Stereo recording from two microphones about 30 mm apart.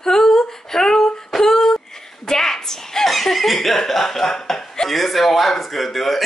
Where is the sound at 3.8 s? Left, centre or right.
Centre.